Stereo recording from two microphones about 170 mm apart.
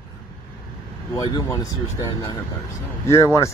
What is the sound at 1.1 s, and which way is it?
Speech, 20° left (ahead or behind).